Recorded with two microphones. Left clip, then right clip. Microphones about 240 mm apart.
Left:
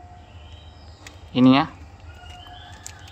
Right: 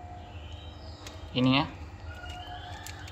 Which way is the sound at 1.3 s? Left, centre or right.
Centre.